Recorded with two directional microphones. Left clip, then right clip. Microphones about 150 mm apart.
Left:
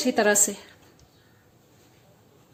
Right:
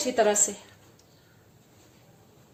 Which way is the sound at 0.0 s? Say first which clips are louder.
Left 2 dB; 75° left (ahead or behind).